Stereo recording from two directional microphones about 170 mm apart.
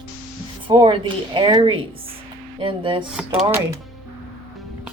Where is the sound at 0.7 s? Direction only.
25° right (ahead or behind).